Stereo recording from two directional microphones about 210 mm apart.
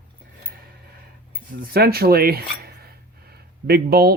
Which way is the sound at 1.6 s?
45° right (ahead or behind).